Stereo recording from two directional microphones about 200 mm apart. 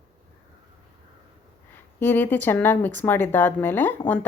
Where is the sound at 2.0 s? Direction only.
10° left (ahead or behind).